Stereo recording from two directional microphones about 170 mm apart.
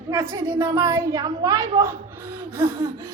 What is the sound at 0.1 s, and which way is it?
A woman's voice, 15° right (ahead or behind).